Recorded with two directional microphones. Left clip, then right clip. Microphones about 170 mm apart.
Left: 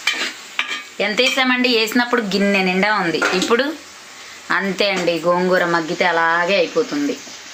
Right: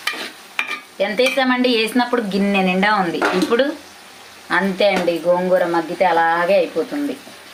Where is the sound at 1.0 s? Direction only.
35° left (ahead or behind).